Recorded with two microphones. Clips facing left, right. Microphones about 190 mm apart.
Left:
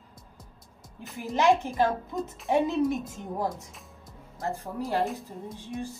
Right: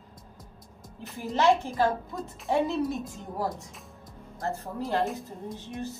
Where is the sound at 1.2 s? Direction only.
15° left (ahead or behind).